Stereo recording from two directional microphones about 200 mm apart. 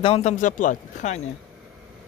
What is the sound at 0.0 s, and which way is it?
Speech, 30° left (ahead or behind).